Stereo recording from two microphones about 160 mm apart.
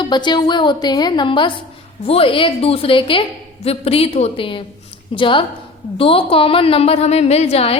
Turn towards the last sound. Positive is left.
turn(degrees=40)  # may be behind; listen again after turning